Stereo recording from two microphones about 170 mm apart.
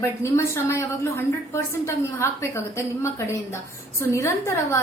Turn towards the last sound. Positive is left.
turn(degrees=15)  # may be behind; listen again after turning